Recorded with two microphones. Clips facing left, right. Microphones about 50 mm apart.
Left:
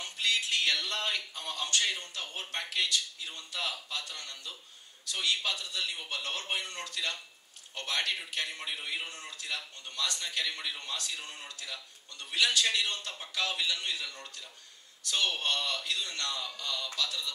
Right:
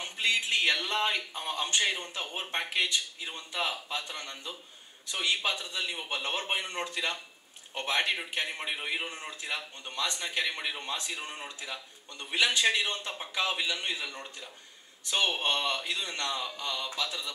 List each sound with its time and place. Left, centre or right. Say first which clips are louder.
0.0 s a man's voice: right 2 dB; right